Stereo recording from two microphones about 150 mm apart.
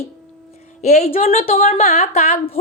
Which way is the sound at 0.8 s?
50° left (ahead or behind).